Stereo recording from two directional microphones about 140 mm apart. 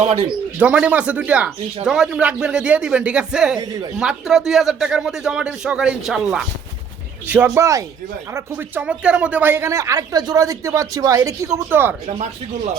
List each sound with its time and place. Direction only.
0.0 s speech: 45° right (ahead or behind)
0.6 s speech: 10° right (ahead or behind)
12.0 s speech: 55° right (ahead or behind)